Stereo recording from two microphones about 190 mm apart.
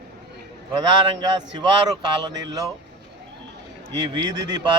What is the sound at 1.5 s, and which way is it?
Speech, 20° right (ahead or behind).